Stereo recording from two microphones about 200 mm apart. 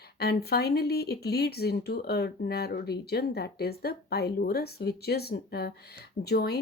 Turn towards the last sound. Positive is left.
turn(degrees=50)  # may be behind; listen again after turning